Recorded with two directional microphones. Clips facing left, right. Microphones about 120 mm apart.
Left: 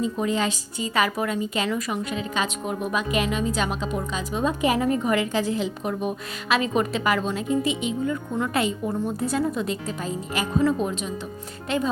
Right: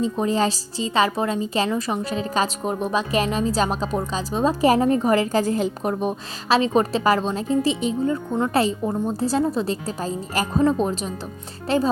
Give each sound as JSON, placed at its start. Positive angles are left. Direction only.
{"t": 0.0, "sound": "speech", "side_deg": -35}